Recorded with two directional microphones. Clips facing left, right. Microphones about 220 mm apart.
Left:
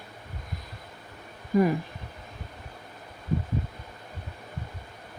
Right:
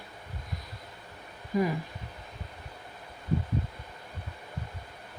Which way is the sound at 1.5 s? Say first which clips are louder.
Left 5 dB; 50° left (ahead or behind).